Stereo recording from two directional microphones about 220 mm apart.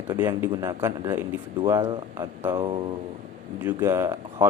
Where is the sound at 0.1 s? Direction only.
15° right (ahead or behind).